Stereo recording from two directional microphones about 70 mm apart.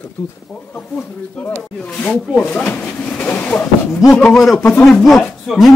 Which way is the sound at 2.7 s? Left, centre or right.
Left.